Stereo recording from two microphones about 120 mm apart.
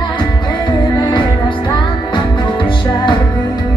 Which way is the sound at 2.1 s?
40° left (ahead or behind).